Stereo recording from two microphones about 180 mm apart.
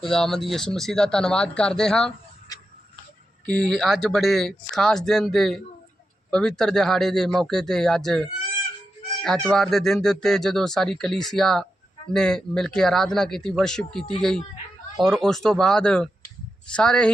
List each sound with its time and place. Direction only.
0.1 s speech: 5° left (ahead or behind)
2.5 s tick-tock: 20° left (ahead or behind)
3.4 s speech: 5° left (ahead or behind)